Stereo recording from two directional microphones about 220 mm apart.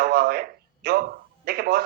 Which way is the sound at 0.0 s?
45° right (ahead or behind).